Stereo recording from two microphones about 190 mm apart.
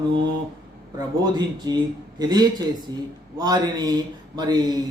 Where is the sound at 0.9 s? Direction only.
20° right (ahead or behind).